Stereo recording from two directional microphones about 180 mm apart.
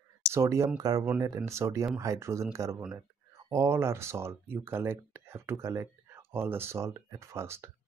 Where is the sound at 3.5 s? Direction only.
15° right (ahead or behind).